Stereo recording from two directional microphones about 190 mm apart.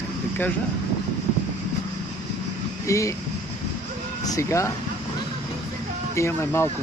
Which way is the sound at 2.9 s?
15° left (ahead or behind).